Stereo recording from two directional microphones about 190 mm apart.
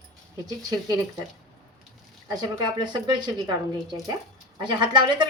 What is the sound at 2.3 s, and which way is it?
A woman's voice, 20° right (ahead or behind).